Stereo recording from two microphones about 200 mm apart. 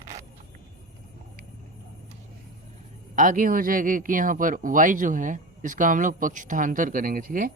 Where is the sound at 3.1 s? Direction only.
40° right (ahead or behind).